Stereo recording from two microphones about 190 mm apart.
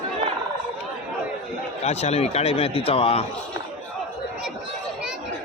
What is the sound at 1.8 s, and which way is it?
A man's voice, 35° left (ahead or behind).